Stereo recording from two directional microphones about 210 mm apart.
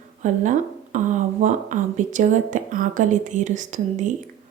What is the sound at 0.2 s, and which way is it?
Speech, 35° right (ahead or behind).